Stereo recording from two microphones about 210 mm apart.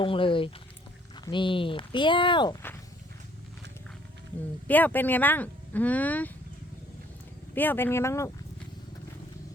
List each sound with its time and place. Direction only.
0.0 s speech: 25° left (ahead or behind)
4.7 s speech: 10° left (ahead or behind)
7.5 s speech: 10° left (ahead or behind)